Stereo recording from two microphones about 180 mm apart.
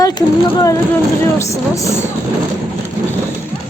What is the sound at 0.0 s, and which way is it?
Speech, 20° left (ahead or behind).